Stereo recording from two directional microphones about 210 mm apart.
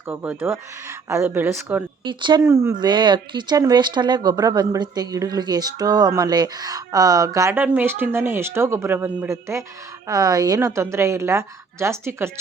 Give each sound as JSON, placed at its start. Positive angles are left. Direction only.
{"t": 0.1, "sound": "speech", "side_deg": -10}
{"t": 2.0, "sound": "speech", "side_deg": -20}